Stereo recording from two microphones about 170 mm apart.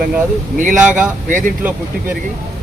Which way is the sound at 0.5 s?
50° right (ahead or behind).